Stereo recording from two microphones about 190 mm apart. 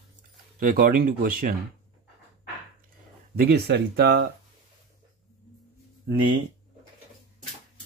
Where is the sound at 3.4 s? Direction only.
60° right (ahead or behind).